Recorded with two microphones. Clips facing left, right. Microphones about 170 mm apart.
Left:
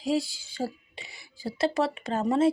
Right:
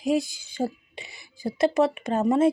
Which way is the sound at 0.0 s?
20° right (ahead or behind).